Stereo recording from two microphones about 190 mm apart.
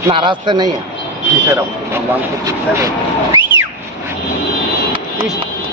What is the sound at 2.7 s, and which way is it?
Speech, 15° right (ahead or behind).